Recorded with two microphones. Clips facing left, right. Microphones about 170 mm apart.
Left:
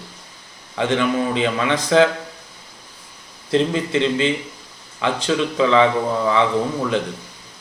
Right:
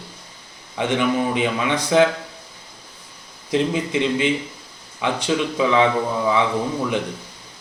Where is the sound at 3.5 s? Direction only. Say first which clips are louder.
Left 2 dB; 15° right (ahead or behind).